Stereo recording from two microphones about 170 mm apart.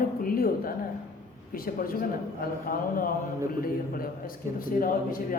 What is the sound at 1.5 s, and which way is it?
A man's voice, 60° left (ahead or behind).